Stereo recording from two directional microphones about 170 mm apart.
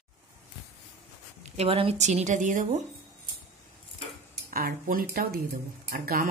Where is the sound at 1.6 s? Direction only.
35° right (ahead or behind); by 2.8 s 50° right (ahead or behind).